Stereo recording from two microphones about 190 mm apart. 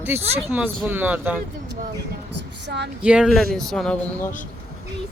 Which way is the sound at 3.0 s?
5° right (ahead or behind).